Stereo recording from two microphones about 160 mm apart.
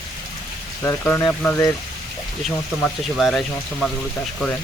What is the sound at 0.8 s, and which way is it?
Speech, 15° left (ahead or behind).